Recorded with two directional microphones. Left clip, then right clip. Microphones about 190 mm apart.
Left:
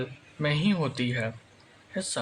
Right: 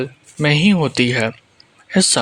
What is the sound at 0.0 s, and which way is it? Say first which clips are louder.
Speech: right 11 dB; 45° right (ahead or behind).